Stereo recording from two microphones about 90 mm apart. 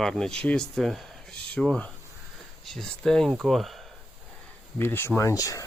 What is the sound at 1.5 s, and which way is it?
Speech, 10° left (ahead or behind).